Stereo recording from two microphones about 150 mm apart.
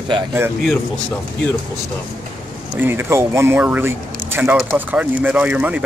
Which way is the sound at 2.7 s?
15° right (ahead or behind).